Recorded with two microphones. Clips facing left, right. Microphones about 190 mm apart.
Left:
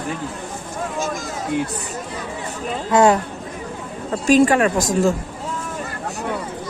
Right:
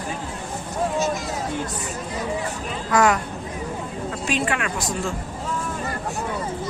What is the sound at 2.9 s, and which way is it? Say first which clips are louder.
Speech: left 5 dB; 30° left (ahead or behind).